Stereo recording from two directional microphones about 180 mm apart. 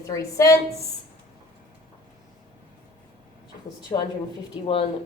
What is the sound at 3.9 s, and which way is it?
Speech, 20° left (ahead or behind).